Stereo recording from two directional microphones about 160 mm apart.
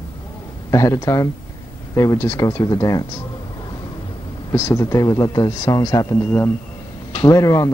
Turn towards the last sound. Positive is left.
turn(degrees=20)  # may be behind; listen again after turning